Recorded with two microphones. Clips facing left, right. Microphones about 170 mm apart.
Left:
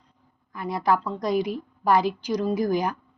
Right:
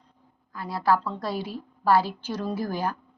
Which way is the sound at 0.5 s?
20° left (ahead or behind).